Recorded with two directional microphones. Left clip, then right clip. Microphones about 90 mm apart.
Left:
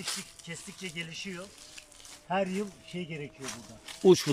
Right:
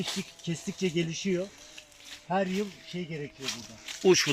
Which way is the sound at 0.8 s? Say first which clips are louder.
Right 9 dB; 20° right (ahead or behind).